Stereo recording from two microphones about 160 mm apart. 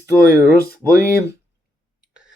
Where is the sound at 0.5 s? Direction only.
70° left (ahead or behind).